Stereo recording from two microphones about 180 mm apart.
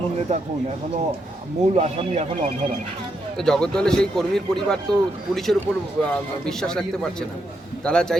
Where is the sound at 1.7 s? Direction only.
35° right (ahead or behind).